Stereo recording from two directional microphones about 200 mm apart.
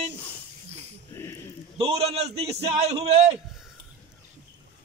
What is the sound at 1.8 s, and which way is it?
A man's voice, 30° right (ahead or behind).